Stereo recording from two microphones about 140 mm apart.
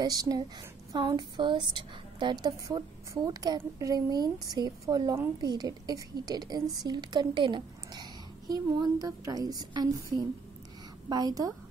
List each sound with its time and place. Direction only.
0.0 s a woman's voice: 25° right (ahead or behind)